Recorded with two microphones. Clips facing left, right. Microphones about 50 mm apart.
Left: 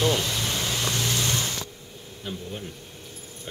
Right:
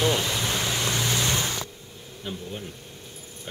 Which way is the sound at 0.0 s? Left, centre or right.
Centre.